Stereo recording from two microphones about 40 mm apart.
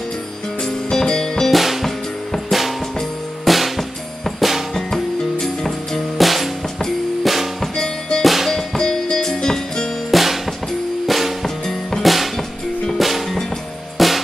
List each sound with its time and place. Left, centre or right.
0.6 s music: centre
1.5 s music: centre
3.4 s drum: centre
4.7 s music: centre
7.7 s music: centre
8.2 s music: centre
8.5 s music: centre
10.1 s music: centre
11.4 s music: centre